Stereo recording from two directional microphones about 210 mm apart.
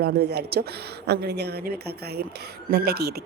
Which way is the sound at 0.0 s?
50° right (ahead or behind).